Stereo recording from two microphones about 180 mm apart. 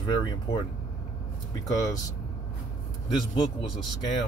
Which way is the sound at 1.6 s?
20° left (ahead or behind).